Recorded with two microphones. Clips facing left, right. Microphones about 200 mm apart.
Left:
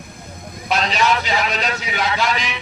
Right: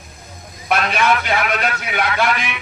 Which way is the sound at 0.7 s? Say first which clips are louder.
Right 1 dB; 55° right (ahead or behind).